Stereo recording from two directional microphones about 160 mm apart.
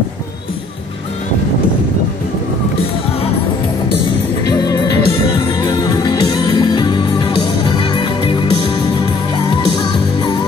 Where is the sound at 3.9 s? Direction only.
30° left (ahead or behind).